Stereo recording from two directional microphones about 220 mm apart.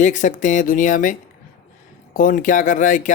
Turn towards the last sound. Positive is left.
turn(degrees=35)  # may be behind; listen again after turning